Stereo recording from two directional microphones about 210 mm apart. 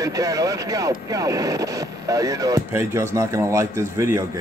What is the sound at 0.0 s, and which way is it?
Speech, 15° right (ahead or behind).